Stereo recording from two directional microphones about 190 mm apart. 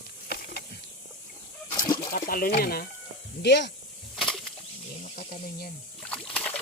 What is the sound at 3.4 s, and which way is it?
Speech, 65° left (ahead or behind).